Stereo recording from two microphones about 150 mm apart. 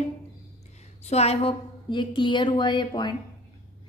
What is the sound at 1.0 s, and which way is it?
A woman's voice, 45° left (ahead or behind).